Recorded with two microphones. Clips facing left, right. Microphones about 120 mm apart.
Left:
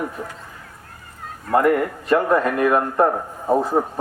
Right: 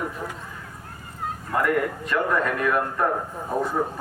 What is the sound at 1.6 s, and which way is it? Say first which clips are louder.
Speech: left 5 dB; 35° left (ahead or behind).